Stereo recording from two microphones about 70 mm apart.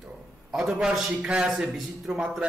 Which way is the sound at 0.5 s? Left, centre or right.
Centre.